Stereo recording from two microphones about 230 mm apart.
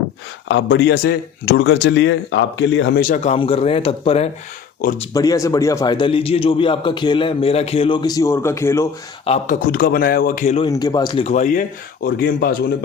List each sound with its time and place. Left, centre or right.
0.4 s a man's voice: left
3.3 s a man's voice: left
9.2 s a man's voice: left
9.6 s speech: left
10.7 s a man's voice: centre; by 12.7 s left